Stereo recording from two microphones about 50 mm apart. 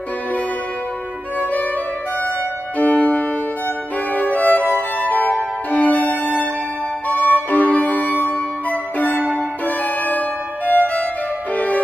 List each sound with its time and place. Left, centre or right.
1.4 s music: left
2.8 s music: left
4.1 s violin: left
4.9 s music: left
9.7 s violin: left
11.5 s music: left